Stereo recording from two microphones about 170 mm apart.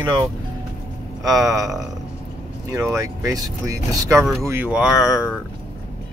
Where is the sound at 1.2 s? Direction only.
20° right (ahead or behind).